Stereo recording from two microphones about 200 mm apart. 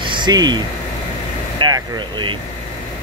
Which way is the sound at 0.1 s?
20° right (ahead or behind).